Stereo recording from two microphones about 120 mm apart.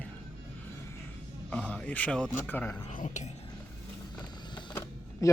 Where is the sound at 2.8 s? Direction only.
85° left.